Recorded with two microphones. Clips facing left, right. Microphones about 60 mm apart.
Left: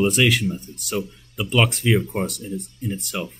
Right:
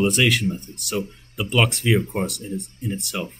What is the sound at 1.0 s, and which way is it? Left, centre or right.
Speech, right.